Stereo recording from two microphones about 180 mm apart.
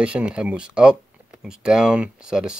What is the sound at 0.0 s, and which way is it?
Speech, 5° right (ahead or behind).